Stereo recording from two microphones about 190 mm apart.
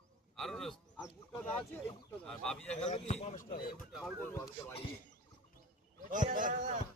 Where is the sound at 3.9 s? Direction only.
Centre (ahead or behind).